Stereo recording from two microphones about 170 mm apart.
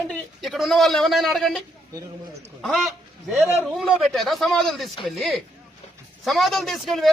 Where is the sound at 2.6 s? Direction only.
Centre (ahead or behind).